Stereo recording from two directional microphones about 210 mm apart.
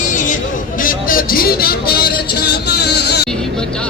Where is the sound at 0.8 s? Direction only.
40° left (ahead or behind).